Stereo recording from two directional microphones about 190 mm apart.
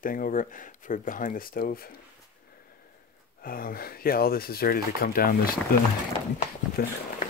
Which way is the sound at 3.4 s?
50° left (ahead or behind).